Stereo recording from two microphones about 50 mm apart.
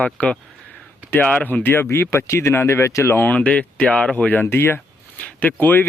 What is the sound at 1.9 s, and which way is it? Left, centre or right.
Speech, left.